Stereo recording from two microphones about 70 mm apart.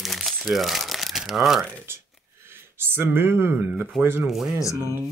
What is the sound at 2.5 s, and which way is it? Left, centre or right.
Speech, right.